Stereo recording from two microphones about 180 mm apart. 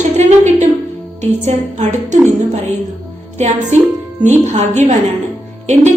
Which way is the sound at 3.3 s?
40° right (ahead or behind).